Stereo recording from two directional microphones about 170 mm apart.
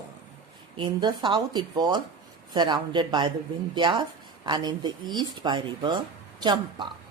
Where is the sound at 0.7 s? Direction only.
30° right (ahead or behind).